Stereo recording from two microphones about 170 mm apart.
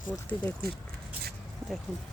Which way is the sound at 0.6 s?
65° right (ahead or behind).